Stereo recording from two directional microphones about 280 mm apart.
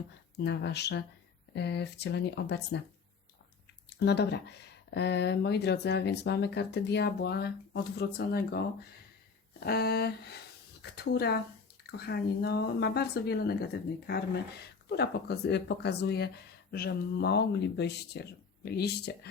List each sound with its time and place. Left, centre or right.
0.3 s speech: left
3.8 s speech: left
9.6 s speech: left